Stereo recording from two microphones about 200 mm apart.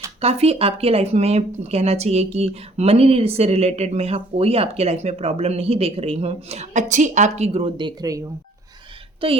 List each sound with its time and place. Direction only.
0.2 s speech: 30° right (ahead or behind)
9.2 s a woman's voice: 30° right (ahead or behind)